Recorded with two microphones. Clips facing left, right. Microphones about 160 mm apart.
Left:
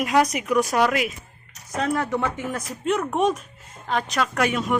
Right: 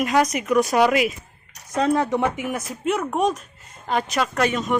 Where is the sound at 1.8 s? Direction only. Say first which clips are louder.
Right 4 dB; 20° right (ahead or behind); by 4.3 s 5° right (ahead or behind).